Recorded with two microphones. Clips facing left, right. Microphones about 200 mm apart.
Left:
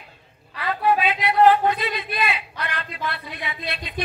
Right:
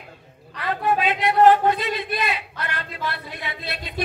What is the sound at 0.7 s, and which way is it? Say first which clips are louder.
Speech: left 1 dB; 45° right (ahead or behind).